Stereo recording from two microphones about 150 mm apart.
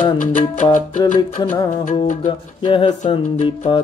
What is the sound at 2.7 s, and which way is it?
Music, 35° left (ahead or behind).